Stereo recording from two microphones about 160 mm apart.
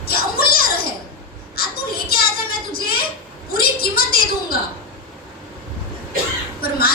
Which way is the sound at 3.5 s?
70° left (ahead or behind).